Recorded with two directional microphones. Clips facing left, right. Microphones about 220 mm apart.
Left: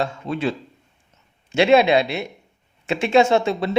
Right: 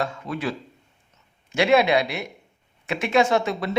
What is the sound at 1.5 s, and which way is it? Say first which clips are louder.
Speech: left 3 dB; 25° left (ahead or behind).